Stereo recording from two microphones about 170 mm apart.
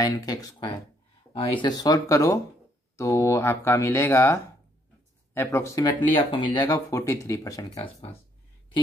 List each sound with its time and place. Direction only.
0.0 s speech: 20° left (ahead or behind)
7.7 s speech: 35° left (ahead or behind)